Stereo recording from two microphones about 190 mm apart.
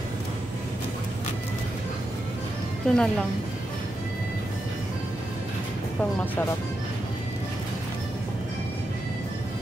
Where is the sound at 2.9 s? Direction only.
5° left (ahead or behind).